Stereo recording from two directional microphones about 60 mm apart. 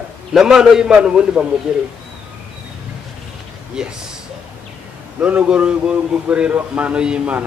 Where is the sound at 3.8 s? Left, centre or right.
Centre.